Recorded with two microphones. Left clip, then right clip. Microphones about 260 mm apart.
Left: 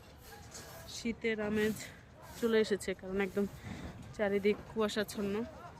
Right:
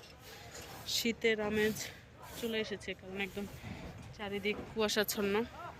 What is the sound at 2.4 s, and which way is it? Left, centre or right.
A woman's voice, centre.